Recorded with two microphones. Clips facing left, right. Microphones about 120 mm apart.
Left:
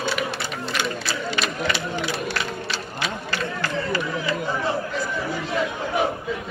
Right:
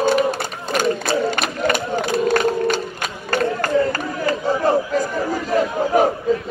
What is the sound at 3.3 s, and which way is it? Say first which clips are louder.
Chatter: right 8 dB; 50° right (ahead or behind).